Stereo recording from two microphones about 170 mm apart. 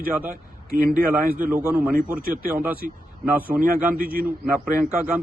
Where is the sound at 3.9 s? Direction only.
60° right (ahead or behind).